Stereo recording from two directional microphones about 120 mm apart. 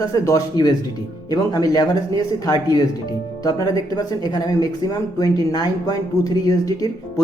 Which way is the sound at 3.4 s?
30° left (ahead or behind).